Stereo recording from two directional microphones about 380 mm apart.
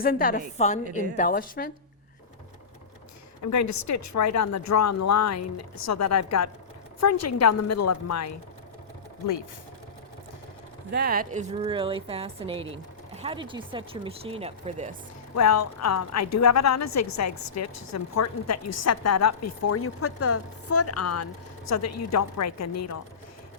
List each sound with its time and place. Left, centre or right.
0.0 s a woman's voice: left
3.4 s a woman's voice: left
10.9 s speech: right
15.4 s a woman's voice: left